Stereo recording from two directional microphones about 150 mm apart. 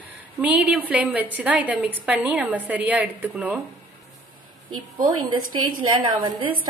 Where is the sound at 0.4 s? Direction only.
5° right (ahead or behind).